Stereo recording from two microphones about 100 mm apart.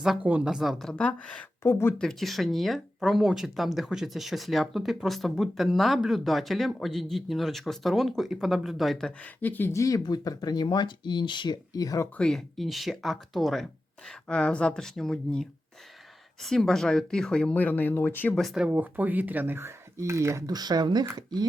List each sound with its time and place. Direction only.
0.0 s speech: 5° right (ahead or behind); by 1.5 s 10° left (ahead or behind)
1.6 s speech: 25° left (ahead or behind)
2.0 s speech: 5° left (ahead or behind)
9.4 s speech: 20° left (ahead or behind)
10.0 s speech: 40° left (ahead or behind)
12.1 s speech: 5° left (ahead or behind)
18.3 s speech: centre (ahead or behind)
18.7 s speech: 15° right (ahead or behind)
20.5 s speech: 40° right (ahead or behind)